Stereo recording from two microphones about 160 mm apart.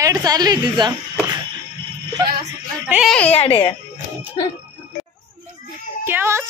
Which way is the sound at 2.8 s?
Centre (ahead or behind).